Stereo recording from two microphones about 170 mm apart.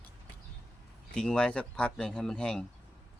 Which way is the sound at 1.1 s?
5° left (ahead or behind).